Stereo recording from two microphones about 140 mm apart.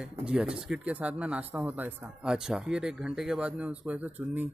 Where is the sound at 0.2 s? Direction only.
5° right (ahead or behind).